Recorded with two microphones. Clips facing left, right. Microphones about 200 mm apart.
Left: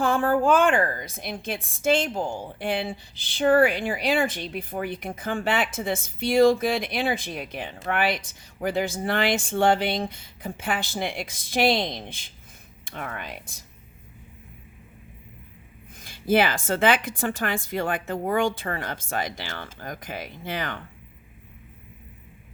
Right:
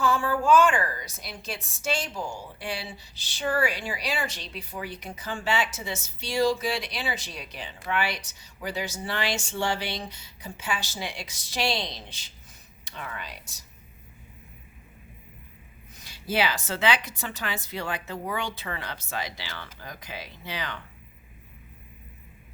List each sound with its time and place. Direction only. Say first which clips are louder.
0.0 s a woman's voice: left 4 dB; 55° left (ahead or behind)
16.0 s a woman's voice: left 6 dB; 50° left (ahead or behind)